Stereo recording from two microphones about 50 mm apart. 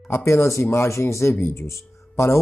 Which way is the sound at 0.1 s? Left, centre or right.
Left.